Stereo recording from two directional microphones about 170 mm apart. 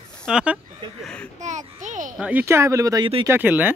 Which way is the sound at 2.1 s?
10° right (ahead or behind).